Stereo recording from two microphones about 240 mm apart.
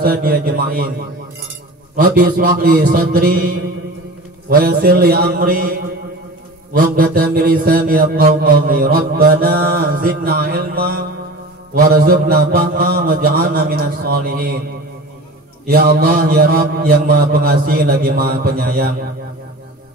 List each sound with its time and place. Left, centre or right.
0.0 s mantra: right
6.8 s mantra: right
15.6 s mantra: right